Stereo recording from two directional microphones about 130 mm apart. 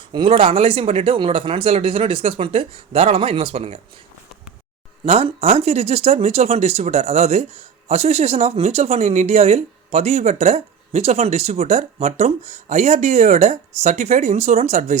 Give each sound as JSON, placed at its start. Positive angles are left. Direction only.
{"t": 0.1, "sound": "speech", "side_deg": -40}
{"t": 5.0, "sound": "speech", "side_deg": -50}